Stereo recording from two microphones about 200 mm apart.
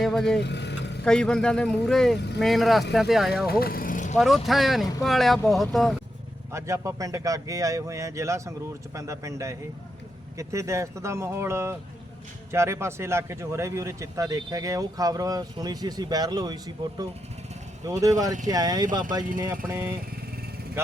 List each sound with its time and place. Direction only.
0.0 s vehicle: centre (ahead or behind)
0.4 s vehicle: 60° left (ahead or behind)
1.0 s speech: 5° left (ahead or behind)
2.1 s speech: 60° left (ahead or behind)
2.4 s speech: centre (ahead or behind)
3.6 s vehicle: 45° left (ahead or behind)
4.2 s speech: centre (ahead or behind)
6.5 s speech: 15° right (ahead or behind)
20.8 s speech: 10° right (ahead or behind)